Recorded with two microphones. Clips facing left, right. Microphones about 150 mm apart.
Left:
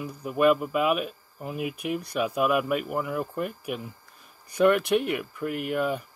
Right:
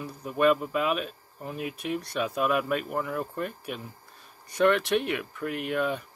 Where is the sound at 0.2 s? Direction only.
5° left (ahead or behind).